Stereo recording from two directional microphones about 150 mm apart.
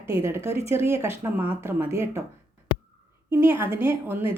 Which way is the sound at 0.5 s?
40° left (ahead or behind).